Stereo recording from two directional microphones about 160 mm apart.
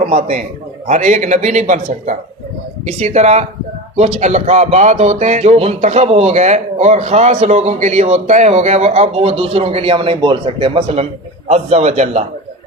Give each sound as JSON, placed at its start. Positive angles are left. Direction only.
{"t": 0.1, "sound": "speech", "side_deg": -50}